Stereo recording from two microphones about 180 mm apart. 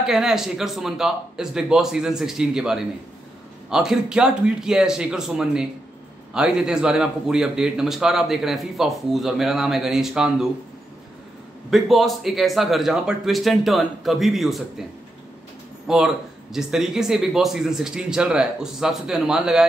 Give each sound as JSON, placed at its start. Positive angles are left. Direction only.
{"t": 0.0, "sound": "a man's voice", "side_deg": 0}
{"t": 11.7, "sound": "a man's voice", "side_deg": 0}
{"t": 15.9, "sound": "a man's voice", "side_deg": -5}